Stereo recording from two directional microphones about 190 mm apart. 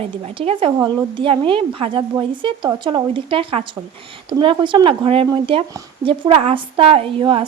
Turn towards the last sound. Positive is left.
turn(degrees=-30)  # may be behind; listen again after turning